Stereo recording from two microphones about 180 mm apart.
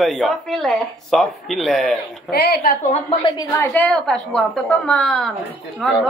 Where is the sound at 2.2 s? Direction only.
60° left (ahead or behind).